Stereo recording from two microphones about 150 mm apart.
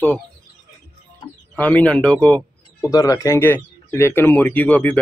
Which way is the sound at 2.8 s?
20° left (ahead or behind).